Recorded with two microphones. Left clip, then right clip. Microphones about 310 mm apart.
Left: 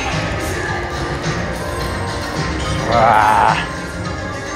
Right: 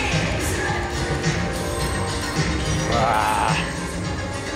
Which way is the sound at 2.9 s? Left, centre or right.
Centre.